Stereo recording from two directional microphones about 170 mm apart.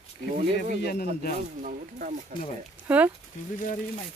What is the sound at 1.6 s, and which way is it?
Speech, 50° right (ahead or behind).